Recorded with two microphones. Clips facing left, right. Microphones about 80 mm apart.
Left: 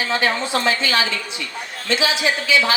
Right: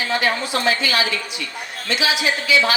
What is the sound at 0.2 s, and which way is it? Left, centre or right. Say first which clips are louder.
Speech: left 1 dB; left.